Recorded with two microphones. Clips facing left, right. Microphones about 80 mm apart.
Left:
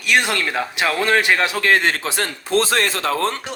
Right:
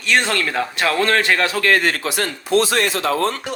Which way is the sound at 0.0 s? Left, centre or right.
Centre.